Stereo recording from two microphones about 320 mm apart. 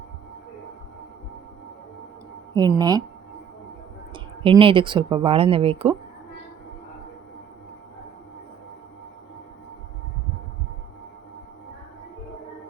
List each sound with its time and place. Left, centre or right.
2.6 s speech: centre
4.1 s speech: centre